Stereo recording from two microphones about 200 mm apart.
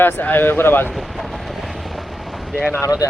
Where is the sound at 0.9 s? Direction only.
Centre (ahead or behind).